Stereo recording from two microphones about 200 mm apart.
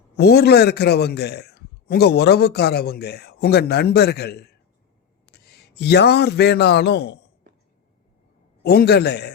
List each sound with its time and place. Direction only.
0.2 s a man's voice: 55° left (ahead or behind)
8.6 s a man's voice: 55° left (ahead or behind)